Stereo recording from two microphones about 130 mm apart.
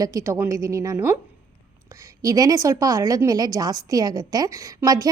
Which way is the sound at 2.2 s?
25° right (ahead or behind).